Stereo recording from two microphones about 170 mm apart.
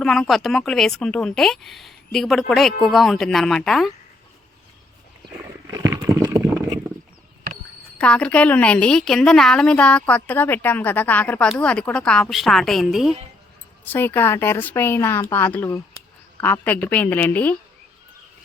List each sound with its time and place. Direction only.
0.0 s a woman's voice: 5° left (ahead or behind)
5.6 s a sound: 20° right (ahead or behind)
7.9 s a woman's voice: 5° left (ahead or behind)
13.8 s a woman's voice: 10° left (ahead or behind)